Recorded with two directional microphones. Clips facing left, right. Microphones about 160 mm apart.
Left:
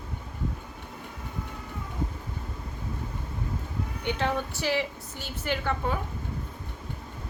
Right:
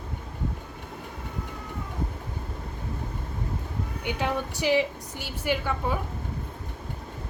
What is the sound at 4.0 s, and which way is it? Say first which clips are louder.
A woman's voice: even; 10° right (ahead or behind).